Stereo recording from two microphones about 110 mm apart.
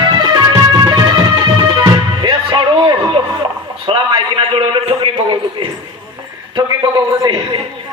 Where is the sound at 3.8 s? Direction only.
55° right (ahead or behind).